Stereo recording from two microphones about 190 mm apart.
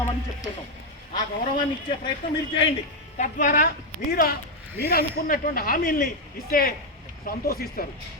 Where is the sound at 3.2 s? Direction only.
45° left (ahead or behind).